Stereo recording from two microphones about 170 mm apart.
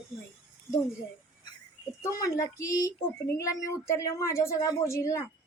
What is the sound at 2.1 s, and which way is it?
Speech, 20° left (ahead or behind).